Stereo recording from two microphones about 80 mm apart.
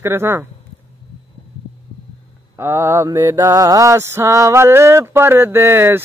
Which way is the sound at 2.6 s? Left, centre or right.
Right.